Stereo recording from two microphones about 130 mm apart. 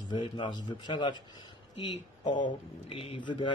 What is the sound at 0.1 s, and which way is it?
A man's voice, 40° left (ahead or behind).